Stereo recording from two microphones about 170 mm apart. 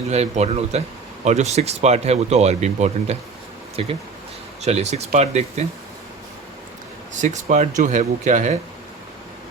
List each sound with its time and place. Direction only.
0.1 s speech: 40° right (ahead or behind)
7.2 s speech: 45° right (ahead or behind)